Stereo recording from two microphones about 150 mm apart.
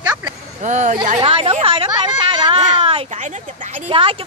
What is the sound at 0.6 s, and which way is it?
Speech, 55° right (ahead or behind).